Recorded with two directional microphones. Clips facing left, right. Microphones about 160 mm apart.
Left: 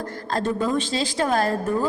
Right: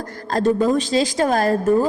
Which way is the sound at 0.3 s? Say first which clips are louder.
Right 6 dB; 40° right (ahead or behind).